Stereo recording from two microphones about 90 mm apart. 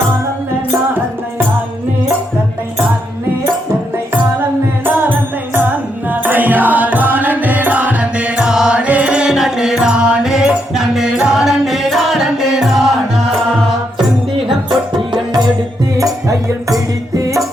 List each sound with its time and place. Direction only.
3.9 s music: 25° right (ahead or behind); by 12.8 s centre (ahead or behind)
17.2 s music: 40° right (ahead or behind)